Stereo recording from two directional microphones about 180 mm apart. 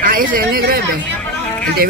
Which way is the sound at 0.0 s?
50° right (ahead or behind).